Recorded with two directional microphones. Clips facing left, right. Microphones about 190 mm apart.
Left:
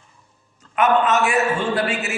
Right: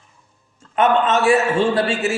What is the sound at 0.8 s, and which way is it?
A man's voice, 30° right (ahead or behind).